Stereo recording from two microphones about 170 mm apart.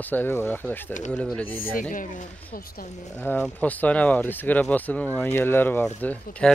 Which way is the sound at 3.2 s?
10° left (ahead or behind).